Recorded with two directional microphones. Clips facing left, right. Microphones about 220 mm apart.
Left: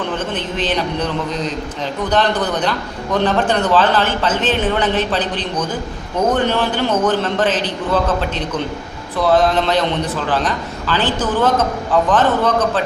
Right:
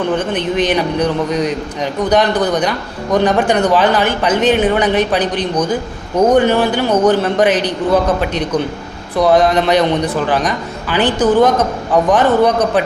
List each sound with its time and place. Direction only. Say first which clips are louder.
0.2 s a man's voice: right 6 dB; 15° right (ahead or behind)